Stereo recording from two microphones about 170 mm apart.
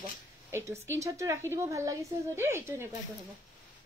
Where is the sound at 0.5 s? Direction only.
15° right (ahead or behind).